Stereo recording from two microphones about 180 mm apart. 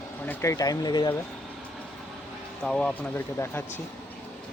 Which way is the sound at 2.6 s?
5° left (ahead or behind).